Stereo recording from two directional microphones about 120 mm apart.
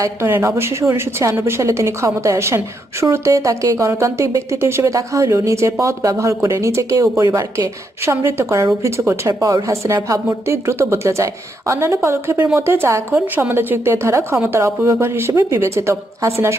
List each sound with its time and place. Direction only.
0.0 s speech: 20° right (ahead or behind)